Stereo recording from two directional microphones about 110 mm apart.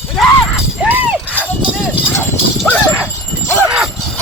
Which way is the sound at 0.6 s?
10° right (ahead or behind).